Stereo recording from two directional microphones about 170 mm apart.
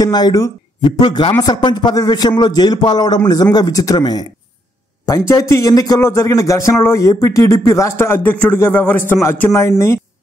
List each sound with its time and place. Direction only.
0.0 s a man's voice: 25° left (ahead or behind)